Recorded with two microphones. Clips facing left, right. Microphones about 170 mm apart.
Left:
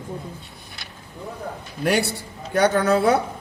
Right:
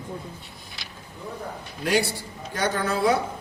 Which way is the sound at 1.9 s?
60° left (ahead or behind).